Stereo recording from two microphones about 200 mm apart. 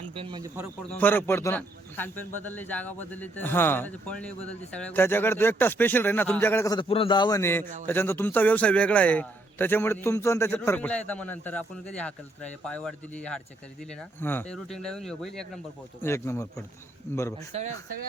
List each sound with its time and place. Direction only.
0.1 s speech: 25° right (ahead or behind)
0.9 s a man's voice: 10° left (ahead or behind)
6.8 s a man's voice: 30° left (ahead or behind); by 15.6 s centre (ahead or behind)
16.0 s a man's voice: 10° left (ahead or behind)
17.5 s speech: 30° right (ahead or behind)